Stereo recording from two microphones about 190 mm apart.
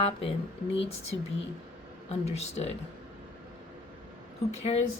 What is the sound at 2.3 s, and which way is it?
Speech, 35° left (ahead or behind).